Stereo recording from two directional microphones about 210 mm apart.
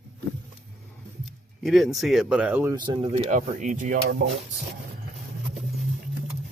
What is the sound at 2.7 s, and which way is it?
Speech, 25° right (ahead or behind).